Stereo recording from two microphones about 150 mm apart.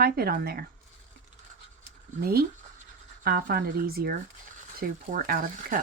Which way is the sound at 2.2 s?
90° right.